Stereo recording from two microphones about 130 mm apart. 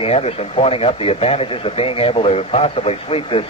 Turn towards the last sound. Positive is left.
turn(degrees=45)  # may be behind; listen again after turning